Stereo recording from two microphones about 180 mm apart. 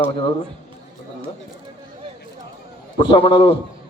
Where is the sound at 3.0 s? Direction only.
30° left (ahead or behind).